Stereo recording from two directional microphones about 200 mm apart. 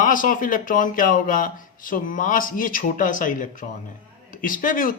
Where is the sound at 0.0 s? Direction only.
40° left (ahead or behind).